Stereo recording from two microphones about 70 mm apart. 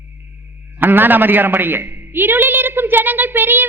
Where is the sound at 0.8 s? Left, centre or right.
Right.